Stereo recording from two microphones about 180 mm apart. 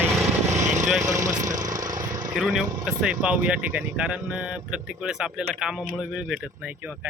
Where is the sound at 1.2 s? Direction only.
45° right (ahead or behind).